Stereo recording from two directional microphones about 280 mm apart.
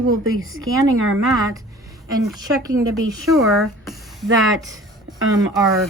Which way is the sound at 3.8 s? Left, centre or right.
Centre.